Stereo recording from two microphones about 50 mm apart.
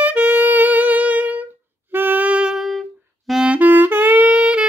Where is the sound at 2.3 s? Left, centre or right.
Right.